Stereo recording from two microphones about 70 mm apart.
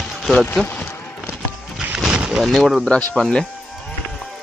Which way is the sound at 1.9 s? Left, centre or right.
Centre.